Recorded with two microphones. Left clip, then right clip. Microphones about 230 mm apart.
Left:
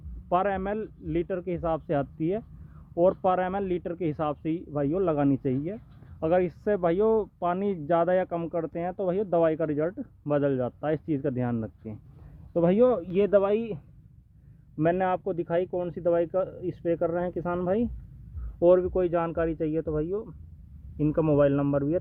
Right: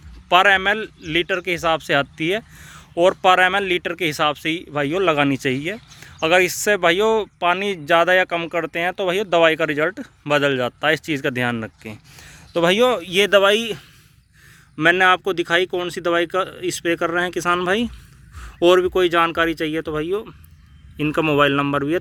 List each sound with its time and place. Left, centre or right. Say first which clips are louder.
0.3 s speech: right 12 dB; centre
14.8 s speech: right 11 dB; centre
18.9 s speech: right 9 dB; centre